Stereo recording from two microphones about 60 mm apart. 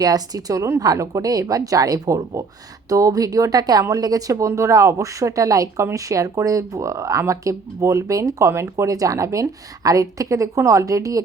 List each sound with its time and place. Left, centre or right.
0.0 s a woman's voice: right
8.8 s speech: right